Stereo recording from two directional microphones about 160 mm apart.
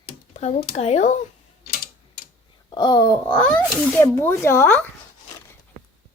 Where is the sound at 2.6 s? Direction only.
25° left (ahead or behind).